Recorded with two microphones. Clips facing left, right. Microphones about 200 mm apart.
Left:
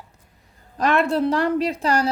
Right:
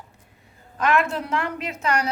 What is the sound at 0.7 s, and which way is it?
A woman's voice, 35° left (ahead or behind).